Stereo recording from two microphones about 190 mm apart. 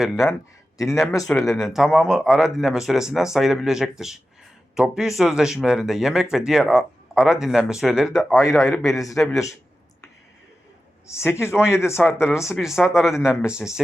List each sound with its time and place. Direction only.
0.0 s speech: centre (ahead or behind)
1.1 s speech: 15° left (ahead or behind)
1.5 s speech: centre (ahead or behind)
8.4 s speech: 15° left (ahead or behind)
9.1 s speech: centre (ahead or behind)
11.2 s speech: 15° left (ahead or behind)
12.5 s speech: centre (ahead or behind)